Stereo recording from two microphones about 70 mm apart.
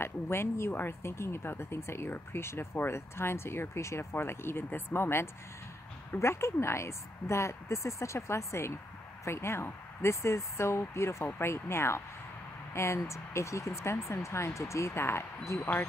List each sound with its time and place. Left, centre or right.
0.0 s speech: left